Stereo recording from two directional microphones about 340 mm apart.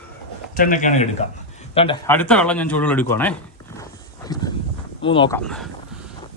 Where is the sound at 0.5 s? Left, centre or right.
Left; by 3.3 s centre.